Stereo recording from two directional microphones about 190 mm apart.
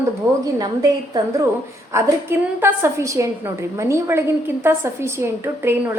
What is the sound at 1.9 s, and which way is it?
A woman's voice, 10° right (ahead or behind).